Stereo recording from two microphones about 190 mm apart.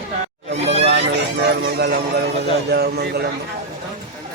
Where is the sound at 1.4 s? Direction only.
55° right (ahead or behind).